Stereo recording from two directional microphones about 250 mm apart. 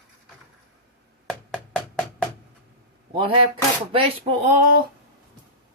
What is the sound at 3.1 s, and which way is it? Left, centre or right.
Speech, centre.